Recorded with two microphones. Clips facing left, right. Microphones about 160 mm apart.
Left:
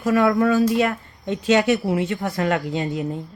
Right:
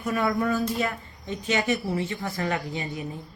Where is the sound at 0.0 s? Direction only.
90° left.